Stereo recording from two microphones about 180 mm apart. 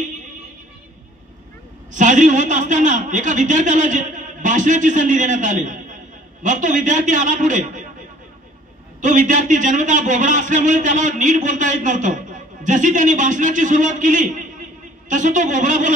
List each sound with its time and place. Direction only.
1.9 s a man's voice: 45° right (ahead or behind)
9.0 s a man's voice: 45° right (ahead or behind)